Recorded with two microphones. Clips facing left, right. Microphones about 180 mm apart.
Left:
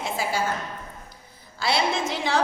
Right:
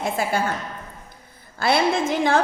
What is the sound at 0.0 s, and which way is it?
Speech, 55° right (ahead or behind).